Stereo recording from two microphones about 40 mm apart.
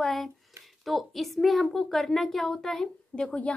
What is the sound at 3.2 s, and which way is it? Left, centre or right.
Speech, left.